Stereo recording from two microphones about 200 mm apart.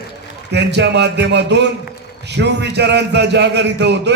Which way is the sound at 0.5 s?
60° right (ahead or behind).